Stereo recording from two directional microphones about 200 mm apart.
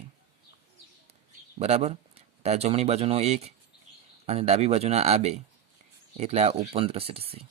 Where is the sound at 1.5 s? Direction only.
30° right (ahead or behind).